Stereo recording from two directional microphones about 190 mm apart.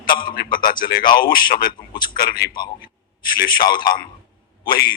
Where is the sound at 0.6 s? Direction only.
50° left (ahead or behind).